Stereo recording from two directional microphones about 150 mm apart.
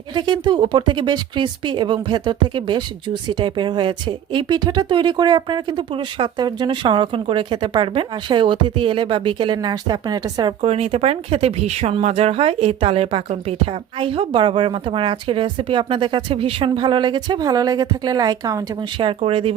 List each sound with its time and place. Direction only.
0.1 s speech: 30° right (ahead or behind)
10.6 s speech: 40° right (ahead or behind); by 19.0 s 25° right (ahead or behind)
19.0 s speech: 40° right (ahead or behind)